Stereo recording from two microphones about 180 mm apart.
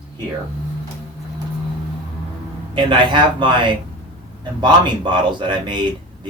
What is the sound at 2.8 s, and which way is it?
A man's voice, 25° right (ahead or behind).